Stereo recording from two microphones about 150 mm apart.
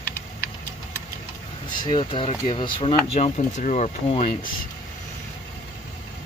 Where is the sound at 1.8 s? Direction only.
35° left (ahead or behind).